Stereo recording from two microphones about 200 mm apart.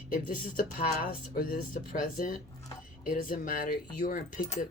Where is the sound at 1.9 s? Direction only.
45° left (ahead or behind).